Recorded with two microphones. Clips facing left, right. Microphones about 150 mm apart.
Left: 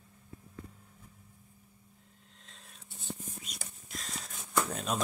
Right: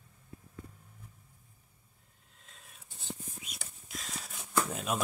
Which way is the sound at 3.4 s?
Centre (ahead or behind).